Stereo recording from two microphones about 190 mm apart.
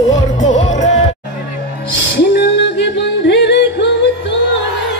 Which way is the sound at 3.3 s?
65° left (ahead or behind).